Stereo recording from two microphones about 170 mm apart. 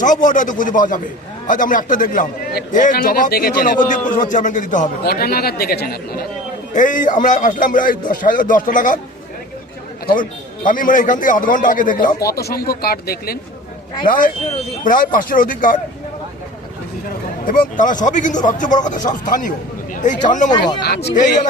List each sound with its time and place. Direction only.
0.0 s a man's voice: 50° left (ahead or behind)
5.0 s speech: 65° left (ahead or behind)
6.7 s a man's voice: 50° left (ahead or behind)
10.1 s a man's voice: 50° left (ahead or behind)
12.3 s a man's voice: 65° left (ahead or behind)
17.4 s a man's voice: 55° left (ahead or behind)
20.5 s speech: 25° left (ahead or behind)
20.8 s speech: 75° left (ahead or behind)